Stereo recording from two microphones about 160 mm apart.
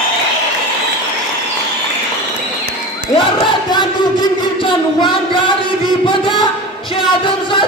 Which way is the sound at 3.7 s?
25° left (ahead or behind).